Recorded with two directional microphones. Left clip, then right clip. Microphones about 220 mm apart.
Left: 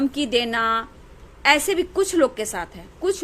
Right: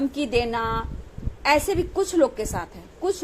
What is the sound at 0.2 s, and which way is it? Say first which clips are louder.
A woman's voice: left 2 dB; 25° left (ahead or behind).